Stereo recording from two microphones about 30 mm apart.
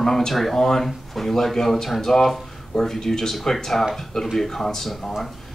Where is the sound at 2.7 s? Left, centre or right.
Centre.